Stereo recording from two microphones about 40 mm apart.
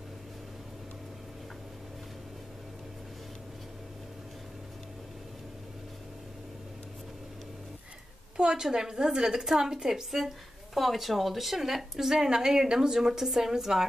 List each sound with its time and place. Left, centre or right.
8.4 s a woman's voice: centre